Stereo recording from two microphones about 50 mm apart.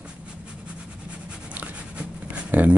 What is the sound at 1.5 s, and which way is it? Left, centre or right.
Writing, right.